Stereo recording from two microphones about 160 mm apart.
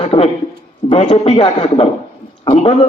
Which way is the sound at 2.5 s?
35° left (ahead or behind).